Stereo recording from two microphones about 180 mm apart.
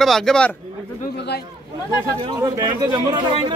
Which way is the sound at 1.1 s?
65° left (ahead or behind).